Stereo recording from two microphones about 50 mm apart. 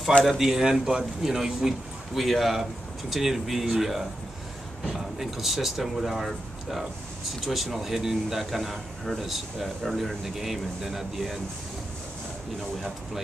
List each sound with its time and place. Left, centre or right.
0.2 s a man's voice: centre